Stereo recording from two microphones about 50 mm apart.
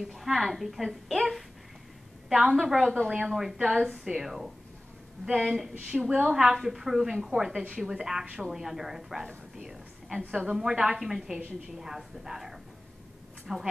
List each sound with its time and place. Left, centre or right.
0.1 s a woman's voice: centre
5.9 s a woman's voice: right
6.2 s a woman's voice: centre
9.6 s a sound: centre
10.3 s a woman's voice: centre